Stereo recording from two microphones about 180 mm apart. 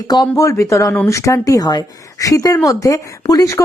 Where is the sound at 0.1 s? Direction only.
20° left (ahead or behind).